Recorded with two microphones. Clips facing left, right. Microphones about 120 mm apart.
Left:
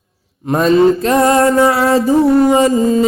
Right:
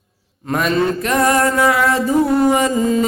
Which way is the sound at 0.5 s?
30° left (ahead or behind).